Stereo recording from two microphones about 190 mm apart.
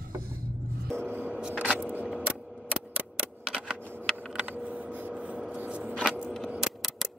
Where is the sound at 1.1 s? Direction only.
10° right (ahead or behind).